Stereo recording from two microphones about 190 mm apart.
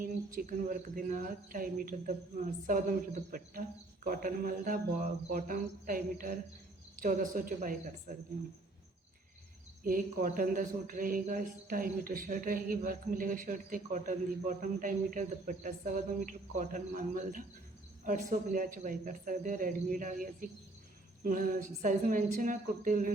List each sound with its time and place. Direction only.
0.0 s a man's voice: 45° right (ahead or behind)
9.8 s a man's voice: 45° right (ahead or behind)